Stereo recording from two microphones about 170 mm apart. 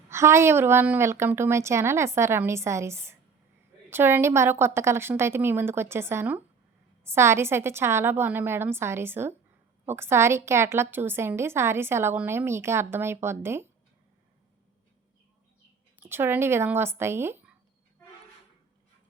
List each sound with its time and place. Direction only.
0.1 s a woman's voice: 15° right (ahead or behind)
16.0 s a woman's voice: 15° right (ahead or behind)